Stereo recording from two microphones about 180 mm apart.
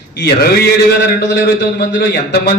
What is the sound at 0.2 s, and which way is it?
Speech, 60° left (ahead or behind).